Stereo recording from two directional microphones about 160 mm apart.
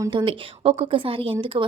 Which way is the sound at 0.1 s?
30° right (ahead or behind).